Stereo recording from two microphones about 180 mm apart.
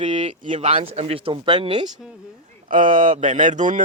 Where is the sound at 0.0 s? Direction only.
40° right (ahead or behind).